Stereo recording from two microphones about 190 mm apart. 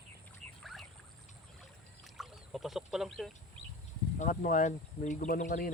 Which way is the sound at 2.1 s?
Centre (ahead or behind).